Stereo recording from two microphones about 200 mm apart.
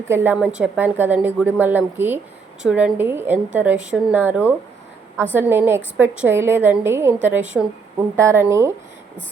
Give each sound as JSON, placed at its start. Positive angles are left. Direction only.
{"t": 0.1, "sound": "a woman's voice", "side_deg": -10}